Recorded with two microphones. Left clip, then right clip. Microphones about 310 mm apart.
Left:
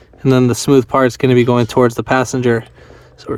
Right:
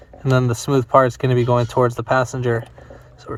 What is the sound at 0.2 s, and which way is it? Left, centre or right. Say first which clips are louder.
Speech: left 7 dB; left.